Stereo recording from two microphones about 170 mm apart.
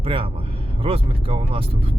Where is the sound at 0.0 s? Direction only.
30° right (ahead or behind).